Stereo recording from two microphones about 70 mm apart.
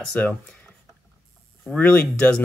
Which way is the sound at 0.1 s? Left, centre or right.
Left.